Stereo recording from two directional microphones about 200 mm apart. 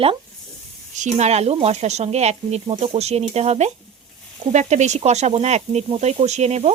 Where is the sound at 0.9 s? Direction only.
35° right (ahead or behind).